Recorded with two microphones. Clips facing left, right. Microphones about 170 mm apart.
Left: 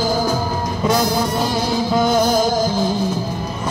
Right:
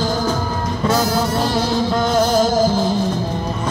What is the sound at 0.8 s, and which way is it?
Music, 15° left (ahead or behind).